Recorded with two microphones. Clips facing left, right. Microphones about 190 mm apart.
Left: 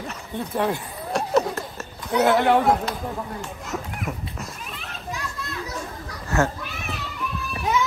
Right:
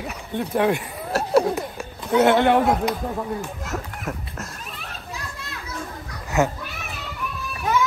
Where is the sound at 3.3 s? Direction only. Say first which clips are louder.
Right 2 dB; centre (ahead or behind).